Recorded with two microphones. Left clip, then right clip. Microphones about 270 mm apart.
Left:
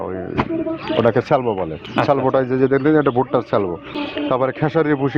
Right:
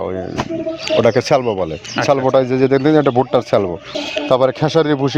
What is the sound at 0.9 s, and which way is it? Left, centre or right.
Speech, right.